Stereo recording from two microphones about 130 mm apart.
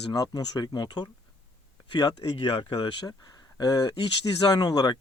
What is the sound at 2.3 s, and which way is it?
Speech, 40° left (ahead or behind).